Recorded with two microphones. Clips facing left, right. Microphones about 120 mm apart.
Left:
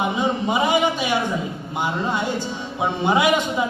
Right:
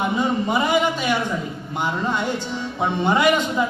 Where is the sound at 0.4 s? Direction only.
15° left (ahead or behind).